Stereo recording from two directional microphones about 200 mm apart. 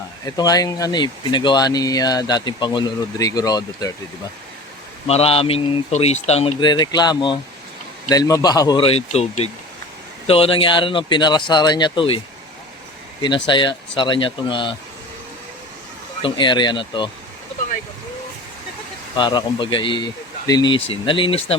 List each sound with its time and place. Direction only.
0.3 s speech: 20° left (ahead or behind)
5.0 s speech: 30° left (ahead or behind)
10.2 s speech: 30° left (ahead or behind)
13.2 s speech: 25° left (ahead or behind)
16.2 s speech: 25° left (ahead or behind)
19.1 s speech: 25° left (ahead or behind)